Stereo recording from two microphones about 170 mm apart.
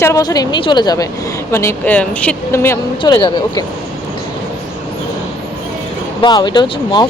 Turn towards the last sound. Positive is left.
turn(degrees=25)  # may be behind; listen again after turning